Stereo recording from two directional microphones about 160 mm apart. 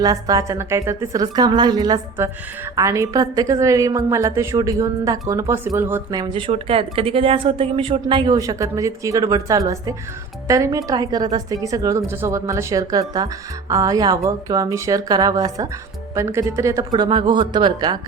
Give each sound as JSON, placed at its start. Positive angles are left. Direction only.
{"t": 0.0, "sound": "a woman's voice", "side_deg": -25}
{"t": 6.1, "sound": "a woman's voice", "side_deg": -25}
{"t": 6.5, "sound": "a woman's voice", "side_deg": -35}